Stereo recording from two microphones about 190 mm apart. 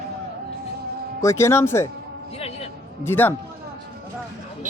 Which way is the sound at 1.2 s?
15° left (ahead or behind).